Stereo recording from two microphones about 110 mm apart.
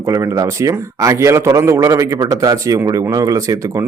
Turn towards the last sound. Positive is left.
turn(degrees=-30)  # may be behind; listen again after turning